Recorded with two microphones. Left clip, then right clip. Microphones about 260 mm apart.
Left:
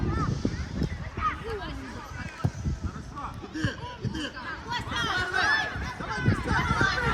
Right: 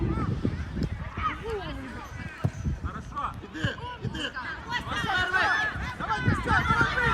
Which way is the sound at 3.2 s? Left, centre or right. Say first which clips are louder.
Right 2 dB; right.